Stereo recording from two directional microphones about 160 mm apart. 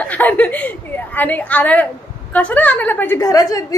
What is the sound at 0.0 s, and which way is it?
A woman's voice, 10° left (ahead or behind).